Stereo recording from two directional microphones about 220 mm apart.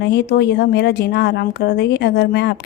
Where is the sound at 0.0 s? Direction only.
50° left (ahead or behind).